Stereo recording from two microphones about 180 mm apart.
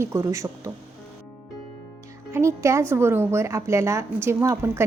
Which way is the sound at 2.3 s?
15° right (ahead or behind).